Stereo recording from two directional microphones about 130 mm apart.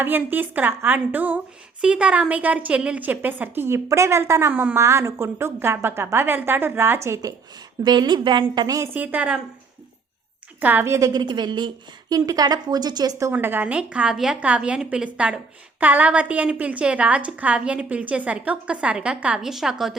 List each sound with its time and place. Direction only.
0.0 s a woman's voice: 15° right (ahead or behind)
7.9 s a woman's voice: 35° right (ahead or behind); by 9.4 s 10° right (ahead or behind)
10.6 s a woman's voice: 15° right (ahead or behind)
11.1 s a woman's voice: 35° right (ahead or behind)
13.3 s a woman's voice: 15° right (ahead or behind)